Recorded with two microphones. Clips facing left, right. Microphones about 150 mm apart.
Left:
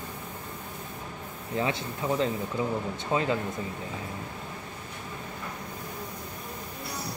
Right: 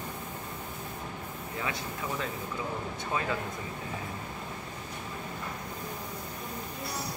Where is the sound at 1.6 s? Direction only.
25° left (ahead or behind).